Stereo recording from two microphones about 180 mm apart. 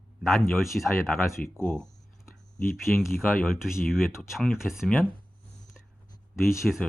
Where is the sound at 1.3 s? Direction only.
15° left (ahead or behind).